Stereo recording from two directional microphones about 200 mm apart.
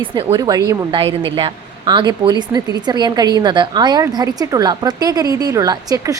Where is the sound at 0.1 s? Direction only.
25° right (ahead or behind).